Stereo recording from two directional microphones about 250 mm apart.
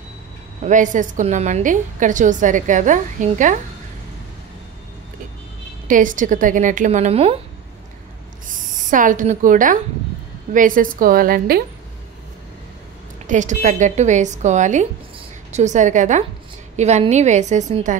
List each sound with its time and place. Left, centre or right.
0.7 s a woman's voice: right
5.9 s a woman's voice: right
8.9 s a woman's voice: right
13.3 s a woman's voice: right